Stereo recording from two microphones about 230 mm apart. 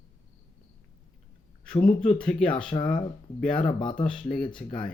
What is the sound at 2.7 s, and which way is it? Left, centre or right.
Speech, left.